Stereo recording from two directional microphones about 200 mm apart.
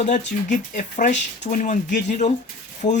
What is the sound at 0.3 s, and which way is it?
Speech, 40° left (ahead or behind).